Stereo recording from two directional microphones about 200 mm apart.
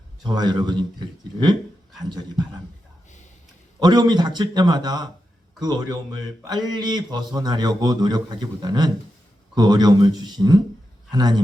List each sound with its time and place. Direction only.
0.2 s speech: 20° right (ahead or behind)
3.8 s speech: 20° right (ahead or behind)